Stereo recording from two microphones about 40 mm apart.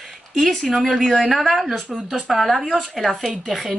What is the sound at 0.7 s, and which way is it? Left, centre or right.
Speech, centre.